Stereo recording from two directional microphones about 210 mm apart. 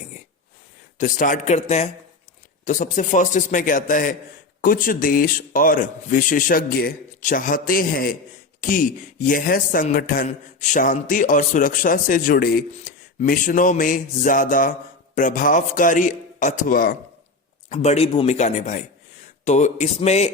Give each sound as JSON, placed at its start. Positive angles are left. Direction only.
{"t": 0.9, "sound": "a man's voice", "side_deg": 40}
{"t": 17.7, "sound": "a man's voice", "side_deg": 30}